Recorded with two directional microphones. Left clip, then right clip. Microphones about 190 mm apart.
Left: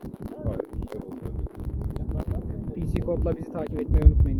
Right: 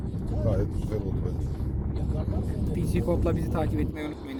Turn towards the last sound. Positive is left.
turn(degrees=10)  # may be behind; listen again after turning